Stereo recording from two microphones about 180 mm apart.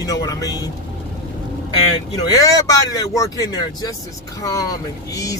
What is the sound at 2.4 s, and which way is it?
Speech, 20° left (ahead or behind).